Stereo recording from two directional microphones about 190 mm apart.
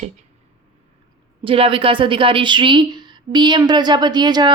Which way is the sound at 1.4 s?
30° right (ahead or behind).